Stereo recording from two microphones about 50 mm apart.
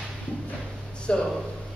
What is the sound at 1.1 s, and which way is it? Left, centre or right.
Speech, left.